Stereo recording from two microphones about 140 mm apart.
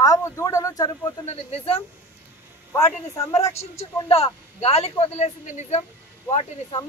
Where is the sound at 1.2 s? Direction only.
45° left (ahead or behind).